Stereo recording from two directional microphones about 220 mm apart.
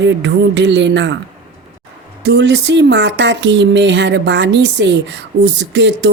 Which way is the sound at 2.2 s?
50° right (ahead or behind).